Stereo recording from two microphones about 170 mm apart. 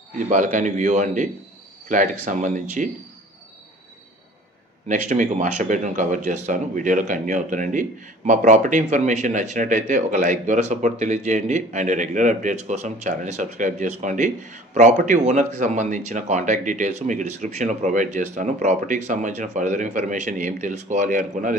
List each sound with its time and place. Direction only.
0.3 s a man's voice: 50° right (ahead or behind)
4.8 s a man's voice: 45° right (ahead or behind)